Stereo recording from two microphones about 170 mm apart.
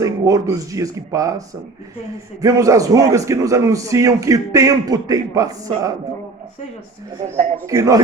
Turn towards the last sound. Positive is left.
turn(degrees=-20)  # may be behind; listen again after turning